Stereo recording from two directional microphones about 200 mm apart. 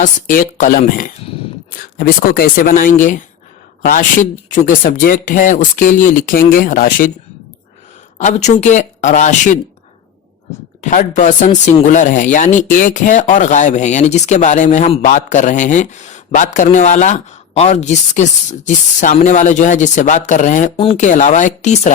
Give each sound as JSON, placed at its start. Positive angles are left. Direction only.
{"t": 0.0, "sound": "speech", "side_deg": 40}
{"t": 4.6, "sound": "speech", "side_deg": 40}
{"t": 8.2, "sound": "speech", "side_deg": 35}
{"t": 10.8, "sound": "speech", "side_deg": 35}